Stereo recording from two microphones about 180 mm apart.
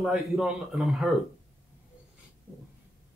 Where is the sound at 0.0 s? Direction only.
Centre (ahead or behind).